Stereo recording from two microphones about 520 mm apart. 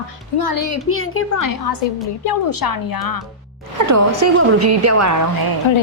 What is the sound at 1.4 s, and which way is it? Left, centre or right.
Speech, left.